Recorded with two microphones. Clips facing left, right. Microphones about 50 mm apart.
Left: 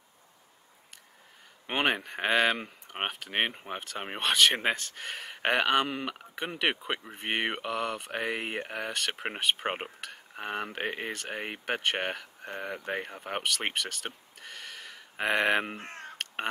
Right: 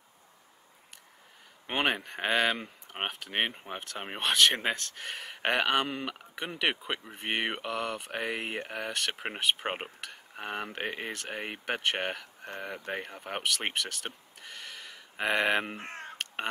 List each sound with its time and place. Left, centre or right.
1.7 s speech: centre
15.8 s caw: right